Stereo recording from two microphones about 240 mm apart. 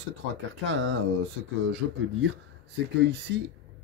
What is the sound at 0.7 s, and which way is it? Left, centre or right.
Speech, right.